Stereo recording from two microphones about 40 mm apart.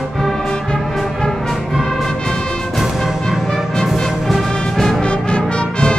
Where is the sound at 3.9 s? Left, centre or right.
Centre.